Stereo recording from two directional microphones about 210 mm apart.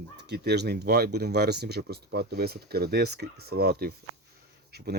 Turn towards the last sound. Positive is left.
turn(degrees=-50)  # may be behind; listen again after turning